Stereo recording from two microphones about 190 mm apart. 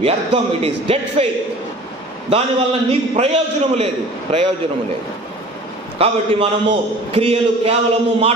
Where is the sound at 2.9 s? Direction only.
30° right (ahead or behind).